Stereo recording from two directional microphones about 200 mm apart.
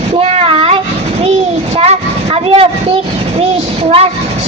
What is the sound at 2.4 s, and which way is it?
Speech, 30° right (ahead or behind).